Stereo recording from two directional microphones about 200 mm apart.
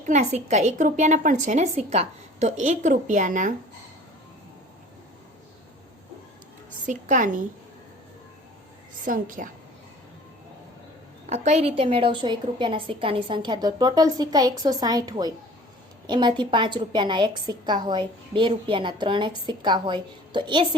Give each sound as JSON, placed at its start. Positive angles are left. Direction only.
{"t": 0.0, "sound": "a woman's voice", "side_deg": -35}
{"t": 6.8, "sound": "a woman's voice", "side_deg": -40}
{"t": 9.0, "sound": "a woman's voice", "side_deg": -40}
{"t": 11.3, "sound": "a woman's voice", "side_deg": -35}